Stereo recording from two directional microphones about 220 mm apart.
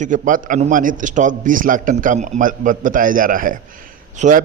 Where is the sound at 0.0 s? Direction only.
35° right (ahead or behind).